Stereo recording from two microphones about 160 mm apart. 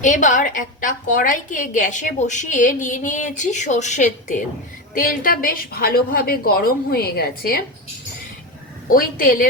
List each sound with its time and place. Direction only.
0.0 s a woman's voice: 50° left (ahead or behind)
4.9 s a woman's voice: 60° left (ahead or behind)
8.9 s a woman's voice: 60° left (ahead or behind)